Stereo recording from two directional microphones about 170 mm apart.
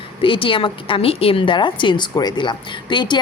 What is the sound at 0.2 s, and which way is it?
A woman's voice, 30° left (ahead or behind).